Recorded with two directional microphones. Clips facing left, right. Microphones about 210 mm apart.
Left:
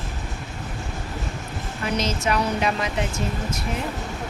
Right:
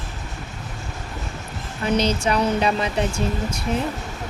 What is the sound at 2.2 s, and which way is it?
Speech, 30° right (ahead or behind).